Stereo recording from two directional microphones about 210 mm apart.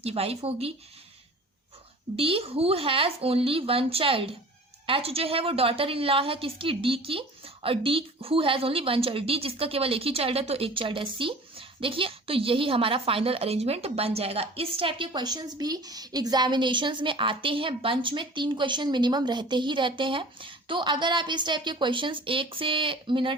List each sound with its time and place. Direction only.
0.0 s a woman's voice: 30° right (ahead or behind)
2.1 s a woman's voice: 25° right (ahead or behind)